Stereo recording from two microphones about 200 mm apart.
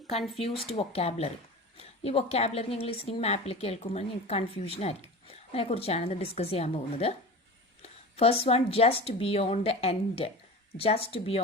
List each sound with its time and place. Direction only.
0.3 s a woman's voice: 30° left (ahead or behind)